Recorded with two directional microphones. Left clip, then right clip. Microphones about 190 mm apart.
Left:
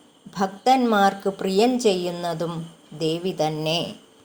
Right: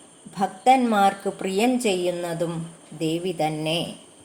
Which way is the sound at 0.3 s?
25° left (ahead or behind).